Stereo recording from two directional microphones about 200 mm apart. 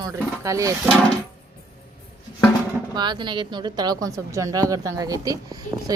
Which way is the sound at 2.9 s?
20° right (ahead or behind).